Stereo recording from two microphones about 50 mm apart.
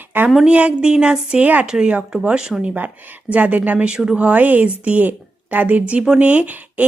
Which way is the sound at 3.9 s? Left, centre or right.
Centre.